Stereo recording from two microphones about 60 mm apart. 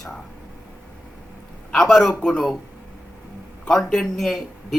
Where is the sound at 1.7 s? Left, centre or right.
Centre.